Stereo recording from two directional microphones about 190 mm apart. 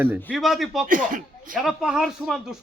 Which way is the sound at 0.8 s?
45° right (ahead or behind).